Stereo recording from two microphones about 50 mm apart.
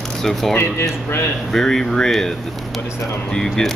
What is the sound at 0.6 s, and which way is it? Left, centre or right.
Speech, left.